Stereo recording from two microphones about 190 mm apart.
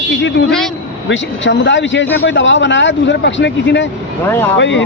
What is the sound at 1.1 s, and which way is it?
Speech, 70° left (ahead or behind).